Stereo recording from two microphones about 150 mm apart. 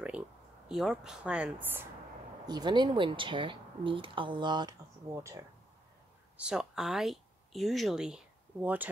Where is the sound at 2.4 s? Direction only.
30° right (ahead or behind).